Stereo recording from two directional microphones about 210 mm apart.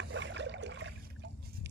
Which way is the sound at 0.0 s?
60° right (ahead or behind).